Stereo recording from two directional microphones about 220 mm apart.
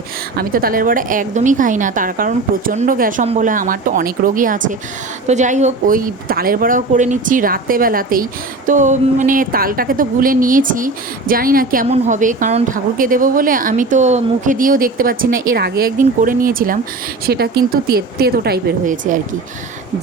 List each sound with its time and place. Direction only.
0.3 s speech: 40° right (ahead or behind)